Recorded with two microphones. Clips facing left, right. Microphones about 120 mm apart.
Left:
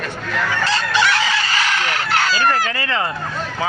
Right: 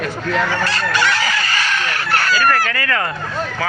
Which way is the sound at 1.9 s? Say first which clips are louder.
Even; 20° left (ahead or behind).